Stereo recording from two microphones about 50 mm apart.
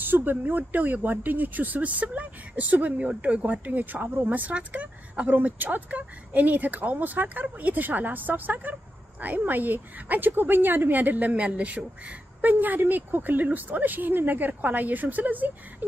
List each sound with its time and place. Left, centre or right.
0.0 s a woman's voice: right
3.6 s a woman's voice: right